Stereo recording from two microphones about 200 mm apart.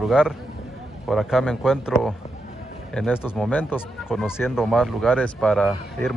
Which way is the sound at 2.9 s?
Centre (ahead or behind).